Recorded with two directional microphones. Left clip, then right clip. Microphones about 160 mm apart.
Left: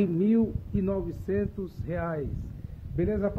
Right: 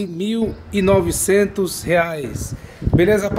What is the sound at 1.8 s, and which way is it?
Speech, 15° right (ahead or behind).